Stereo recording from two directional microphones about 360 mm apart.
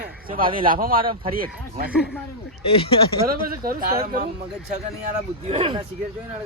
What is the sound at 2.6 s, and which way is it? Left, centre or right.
Speech, centre.